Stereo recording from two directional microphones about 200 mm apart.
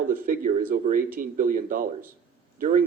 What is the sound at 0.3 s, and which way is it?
Speech, 40° right (ahead or behind).